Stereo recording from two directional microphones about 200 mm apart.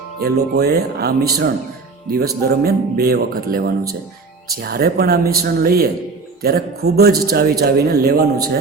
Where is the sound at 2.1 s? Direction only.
50° right (ahead or behind).